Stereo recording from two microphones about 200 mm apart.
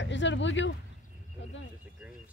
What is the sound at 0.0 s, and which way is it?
Speech, 65° left (ahead or behind).